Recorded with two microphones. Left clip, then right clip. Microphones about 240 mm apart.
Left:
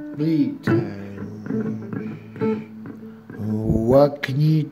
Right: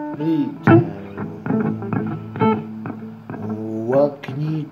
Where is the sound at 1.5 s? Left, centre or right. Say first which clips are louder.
Right 5 dB; right.